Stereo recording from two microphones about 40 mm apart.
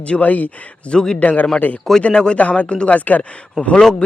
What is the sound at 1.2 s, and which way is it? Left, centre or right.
Speech, left.